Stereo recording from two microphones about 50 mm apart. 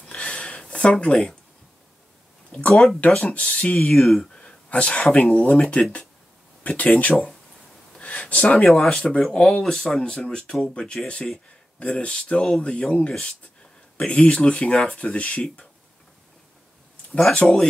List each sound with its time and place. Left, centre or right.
0.0 s a sound: centre
1.0 s speech: centre
2.7 s speech: centre
3.1 s speech: centre
3.9 s speech: centre
4.2 s a sound: left
5.1 s speech: left
8.0 s a sound: left
8.6 s speech: centre
13.9 s speech: left
17.4 s speech: centre